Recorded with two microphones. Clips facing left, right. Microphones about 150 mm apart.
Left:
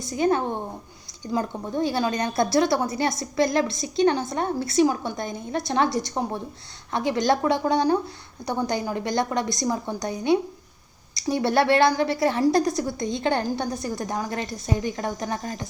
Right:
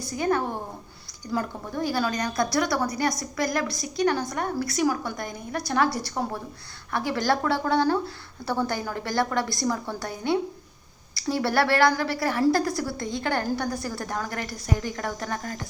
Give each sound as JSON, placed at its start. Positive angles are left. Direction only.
{"t": 0.0, "sound": "a woman's voice", "side_deg": 20}